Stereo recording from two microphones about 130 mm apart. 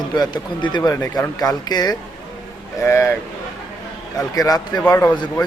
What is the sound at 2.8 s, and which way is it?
Speech, 20° left (ahead or behind).